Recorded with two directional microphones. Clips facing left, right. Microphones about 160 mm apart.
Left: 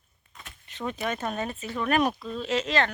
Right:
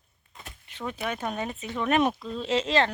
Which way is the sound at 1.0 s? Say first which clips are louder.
Even; 10° right (ahead or behind).